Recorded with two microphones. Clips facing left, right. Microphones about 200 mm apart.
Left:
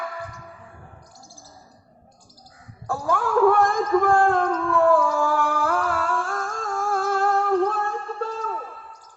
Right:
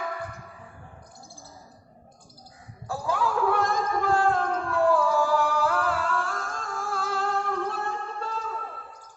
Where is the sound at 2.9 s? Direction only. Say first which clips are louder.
Left 4 dB; 50° left (ahead or behind).